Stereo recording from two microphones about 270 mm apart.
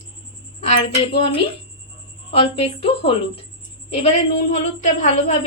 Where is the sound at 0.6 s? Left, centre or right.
Left.